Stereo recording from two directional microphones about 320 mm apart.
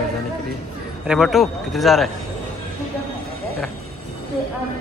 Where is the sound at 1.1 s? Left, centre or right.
Centre.